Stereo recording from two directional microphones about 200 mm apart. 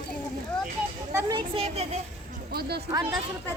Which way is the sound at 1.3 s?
25° right (ahead or behind).